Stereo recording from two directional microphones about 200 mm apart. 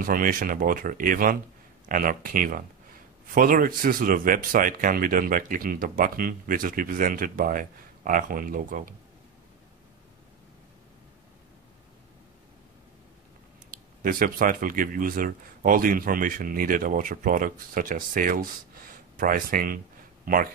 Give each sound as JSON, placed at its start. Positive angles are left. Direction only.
{"t": 0.0, "sound": "a man's voice", "side_deg": -45}
{"t": 14.0, "sound": "a man's voice", "side_deg": -45}